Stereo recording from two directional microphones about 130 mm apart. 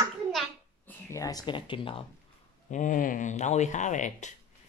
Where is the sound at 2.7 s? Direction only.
85° left.